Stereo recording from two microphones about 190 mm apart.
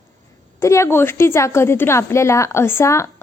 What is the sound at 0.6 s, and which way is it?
A woman's voice, 15° left (ahead or behind).